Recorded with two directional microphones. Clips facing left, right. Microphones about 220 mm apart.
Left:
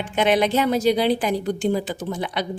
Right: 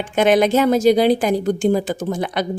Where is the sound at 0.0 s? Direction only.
45° right (ahead or behind).